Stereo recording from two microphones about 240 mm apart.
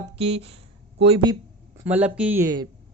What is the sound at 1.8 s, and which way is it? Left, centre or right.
Speech, centre.